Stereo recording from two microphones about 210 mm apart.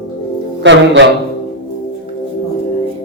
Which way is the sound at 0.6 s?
60° right (ahead or behind).